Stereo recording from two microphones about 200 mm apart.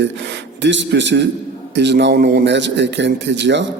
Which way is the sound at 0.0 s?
60° right (ahead or behind).